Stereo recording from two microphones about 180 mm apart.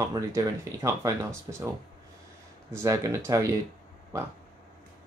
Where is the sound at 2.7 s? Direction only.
15° right (ahead or behind).